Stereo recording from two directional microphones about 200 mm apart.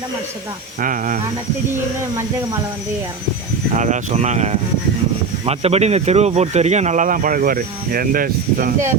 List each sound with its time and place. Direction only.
0.8 s speech: 40° right (ahead or behind)
3.8 s speech: 35° right (ahead or behind)